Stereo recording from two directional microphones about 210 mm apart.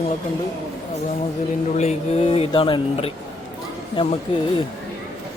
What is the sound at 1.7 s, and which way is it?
Speech, 35° left (ahead or behind).